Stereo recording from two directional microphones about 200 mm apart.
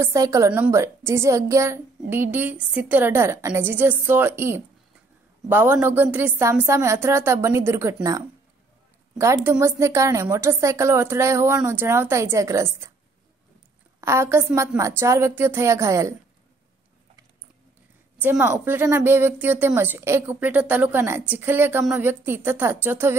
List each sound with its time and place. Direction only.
0.0 s speech: 15° right (ahead or behind)
9.2 s speech: 15° right (ahead or behind)
14.0 s speech: 15° right (ahead or behind)
18.2 s speech: 10° right (ahead or behind)